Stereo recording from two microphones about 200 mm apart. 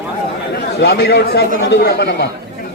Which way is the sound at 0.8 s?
55° left (ahead or behind).